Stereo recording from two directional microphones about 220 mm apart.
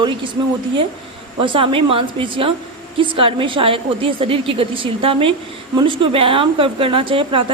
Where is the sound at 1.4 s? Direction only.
25° right (ahead or behind).